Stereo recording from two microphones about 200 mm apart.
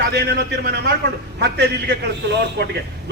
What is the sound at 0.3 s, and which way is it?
A man's voice, 55° right (ahead or behind).